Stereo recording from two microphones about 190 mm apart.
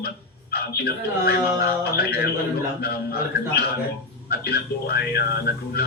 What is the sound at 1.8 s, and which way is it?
A man's voice, 55° left (ahead or behind).